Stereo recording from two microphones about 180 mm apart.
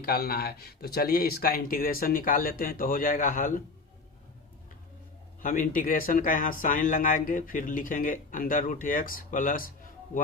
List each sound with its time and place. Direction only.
0.0 s speech: 55° left (ahead or behind)
5.4 s speech: 50° left (ahead or behind)